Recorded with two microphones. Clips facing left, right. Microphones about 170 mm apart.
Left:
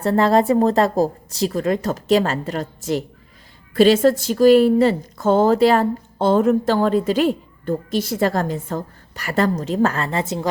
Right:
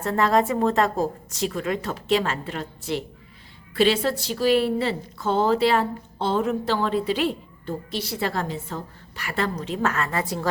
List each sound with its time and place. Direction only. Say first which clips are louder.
0.0 s a woman's voice: left 5 dB; 30° left (ahead or behind)